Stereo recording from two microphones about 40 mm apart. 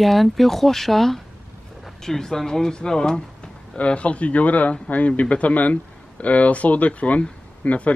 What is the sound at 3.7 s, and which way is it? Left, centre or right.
Speech, left.